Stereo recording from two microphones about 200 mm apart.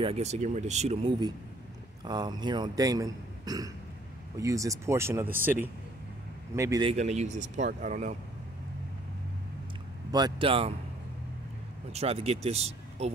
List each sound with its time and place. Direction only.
0.0 s speech: 30° right (ahead or behind)
2.0 s a man's voice: 20° right (ahead or behind)
6.8 s speech: 30° right (ahead or behind)
10.1 s a man's voice: 25° right (ahead or behind)
11.9 s speech: 30° right (ahead or behind)